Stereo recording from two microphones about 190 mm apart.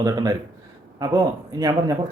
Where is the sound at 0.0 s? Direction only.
20° right (ahead or behind).